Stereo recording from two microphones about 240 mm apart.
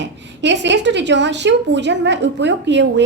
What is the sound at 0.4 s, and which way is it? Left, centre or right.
A woman's voice, right.